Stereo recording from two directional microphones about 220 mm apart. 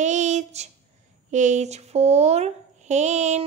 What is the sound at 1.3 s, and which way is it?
A child's voice, 35° right (ahead or behind).